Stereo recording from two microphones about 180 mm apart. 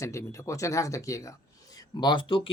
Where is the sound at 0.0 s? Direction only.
15° left (ahead or behind).